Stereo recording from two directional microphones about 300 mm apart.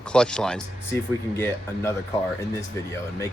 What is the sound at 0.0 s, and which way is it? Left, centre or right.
Speech, centre.